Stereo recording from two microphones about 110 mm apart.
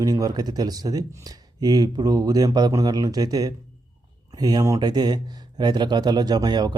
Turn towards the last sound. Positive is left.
turn(degrees=-40)  # may be behind; listen again after turning